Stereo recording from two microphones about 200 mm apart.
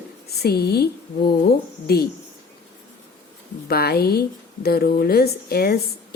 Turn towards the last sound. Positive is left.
turn(degrees=50)  # may be behind; listen again after turning